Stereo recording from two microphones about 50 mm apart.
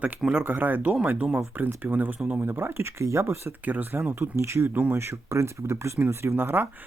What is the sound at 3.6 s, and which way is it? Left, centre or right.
Speech, right.